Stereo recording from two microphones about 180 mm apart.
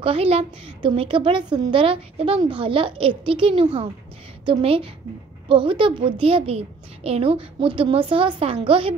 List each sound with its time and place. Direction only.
0.0 s a woman's voice: 30° right (ahead or behind)